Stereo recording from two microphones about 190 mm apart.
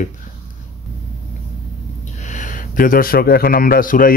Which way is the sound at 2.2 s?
40° left (ahead or behind).